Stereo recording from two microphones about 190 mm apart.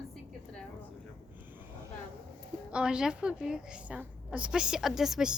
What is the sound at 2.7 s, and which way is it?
A woman's voice, 5° right (ahead or behind).